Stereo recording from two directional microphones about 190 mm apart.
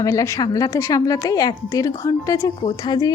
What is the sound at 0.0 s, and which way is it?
A woman's voice, 15° left (ahead or behind).